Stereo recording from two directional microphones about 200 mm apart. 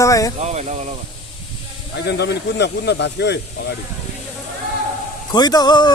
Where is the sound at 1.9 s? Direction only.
55° left (ahead or behind).